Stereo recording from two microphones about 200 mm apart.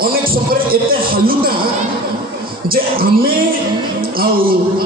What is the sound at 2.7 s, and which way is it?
Speech, 45° right (ahead or behind).